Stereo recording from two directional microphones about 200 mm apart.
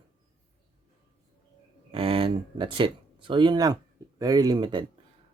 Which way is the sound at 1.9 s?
25° right (ahead or behind).